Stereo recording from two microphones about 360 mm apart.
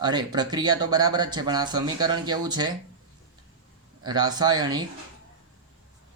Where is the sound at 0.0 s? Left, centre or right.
Centre.